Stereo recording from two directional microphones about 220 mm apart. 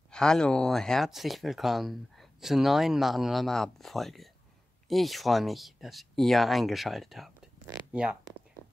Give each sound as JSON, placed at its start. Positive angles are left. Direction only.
{"t": 0.1, "sound": "speech", "side_deg": 5}